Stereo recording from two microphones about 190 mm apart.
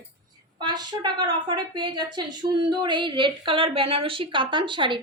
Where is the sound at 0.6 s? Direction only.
20° right (ahead or behind).